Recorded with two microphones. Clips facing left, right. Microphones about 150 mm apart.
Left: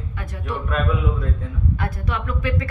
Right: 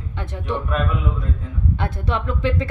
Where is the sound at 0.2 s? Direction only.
25° right (ahead or behind).